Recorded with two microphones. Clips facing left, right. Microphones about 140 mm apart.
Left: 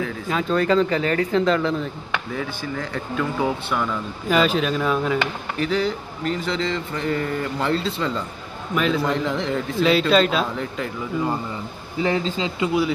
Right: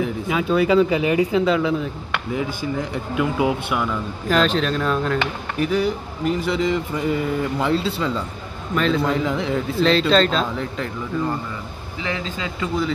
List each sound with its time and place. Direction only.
0.3 s speech: 5° right (ahead or behind)
2.3 s speech: 15° right (ahead or behind)
4.3 s a man's voice: 5° left (ahead or behind)
5.6 s a man's voice: 10° right (ahead or behind)
12.0 s speech: 35° left (ahead or behind)